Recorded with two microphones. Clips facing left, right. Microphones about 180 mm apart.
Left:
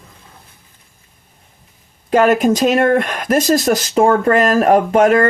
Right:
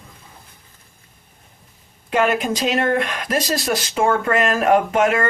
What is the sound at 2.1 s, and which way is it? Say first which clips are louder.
Speech: left 7 dB; 40° left (ahead or behind).